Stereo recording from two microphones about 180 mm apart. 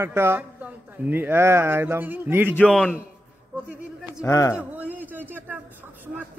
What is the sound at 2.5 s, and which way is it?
Speech, 5° left (ahead or behind).